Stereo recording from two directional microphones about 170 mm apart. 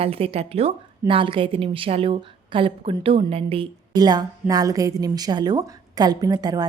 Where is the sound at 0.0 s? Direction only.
35° right (ahead or behind).